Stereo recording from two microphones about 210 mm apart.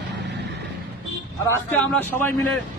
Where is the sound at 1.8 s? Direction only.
5° left (ahead or behind).